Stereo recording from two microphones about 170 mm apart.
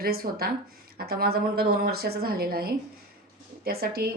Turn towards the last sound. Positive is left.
turn(degrees=-65)  # may be behind; listen again after turning